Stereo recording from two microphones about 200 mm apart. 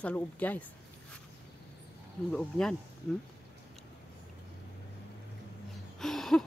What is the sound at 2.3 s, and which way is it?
Speech, 5° left (ahead or behind).